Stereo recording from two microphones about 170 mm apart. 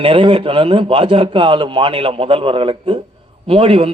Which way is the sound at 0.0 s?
30° right (ahead or behind).